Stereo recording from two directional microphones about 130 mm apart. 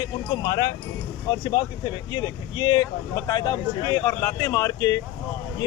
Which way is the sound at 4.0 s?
15° left (ahead or behind).